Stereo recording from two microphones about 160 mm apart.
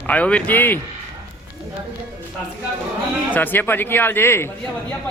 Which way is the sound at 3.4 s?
10° left (ahead or behind).